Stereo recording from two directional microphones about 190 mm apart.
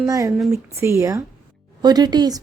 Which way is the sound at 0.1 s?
15° right (ahead or behind).